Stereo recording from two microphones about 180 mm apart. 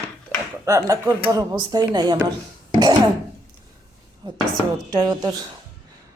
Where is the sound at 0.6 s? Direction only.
15° right (ahead or behind).